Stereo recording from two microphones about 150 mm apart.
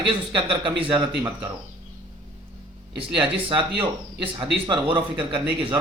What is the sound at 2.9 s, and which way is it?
Speech, 35° right (ahead or behind).